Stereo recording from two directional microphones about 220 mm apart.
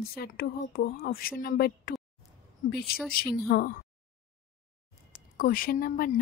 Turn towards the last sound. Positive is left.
turn(degrees=40)  # may be behind; listen again after turning